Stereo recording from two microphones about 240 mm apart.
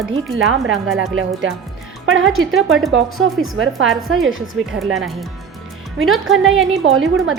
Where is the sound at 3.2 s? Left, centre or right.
Right.